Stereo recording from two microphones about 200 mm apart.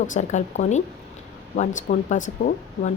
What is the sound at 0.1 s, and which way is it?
Speech, 35° left (ahead or behind).